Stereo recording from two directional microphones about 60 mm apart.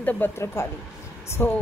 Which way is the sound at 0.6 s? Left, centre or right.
Left.